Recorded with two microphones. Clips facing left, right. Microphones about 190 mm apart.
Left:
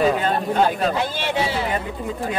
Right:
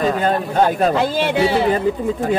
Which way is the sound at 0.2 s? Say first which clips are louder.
Right 3 dB; 45° right (ahead or behind).